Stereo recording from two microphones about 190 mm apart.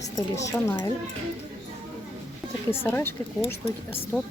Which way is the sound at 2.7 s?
10° left (ahead or behind).